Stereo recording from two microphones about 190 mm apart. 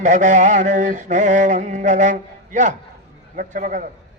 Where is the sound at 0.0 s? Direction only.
40° right (ahead or behind).